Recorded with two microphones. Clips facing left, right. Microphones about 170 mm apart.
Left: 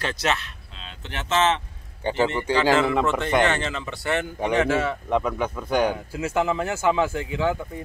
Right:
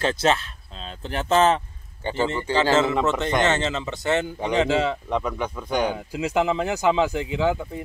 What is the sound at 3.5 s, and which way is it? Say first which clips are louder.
Speech: right 3 dB; 25° right (ahead or behind).